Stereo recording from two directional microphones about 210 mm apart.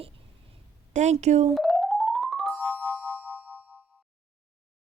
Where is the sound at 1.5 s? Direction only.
Centre (ahead or behind).